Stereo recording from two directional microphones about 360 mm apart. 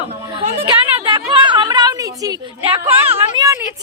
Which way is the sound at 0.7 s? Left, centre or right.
Centre.